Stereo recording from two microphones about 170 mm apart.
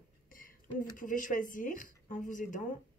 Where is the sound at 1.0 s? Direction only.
50° left (ahead or behind).